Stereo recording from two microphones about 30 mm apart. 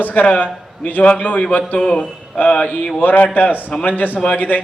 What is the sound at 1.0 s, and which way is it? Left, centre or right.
Speech, left.